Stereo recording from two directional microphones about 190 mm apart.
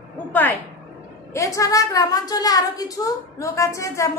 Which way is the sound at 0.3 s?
10° left (ahead or behind).